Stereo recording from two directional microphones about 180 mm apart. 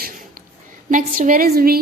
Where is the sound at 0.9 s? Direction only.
50° right (ahead or behind).